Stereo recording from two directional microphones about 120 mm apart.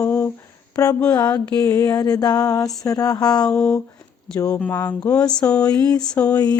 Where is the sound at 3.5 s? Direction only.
5° left (ahead or behind).